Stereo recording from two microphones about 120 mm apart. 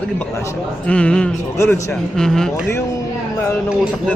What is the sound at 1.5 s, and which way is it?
Speech, 20° left (ahead or behind).